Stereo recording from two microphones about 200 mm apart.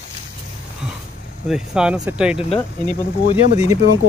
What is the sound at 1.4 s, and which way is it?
Speech, 5° right (ahead or behind).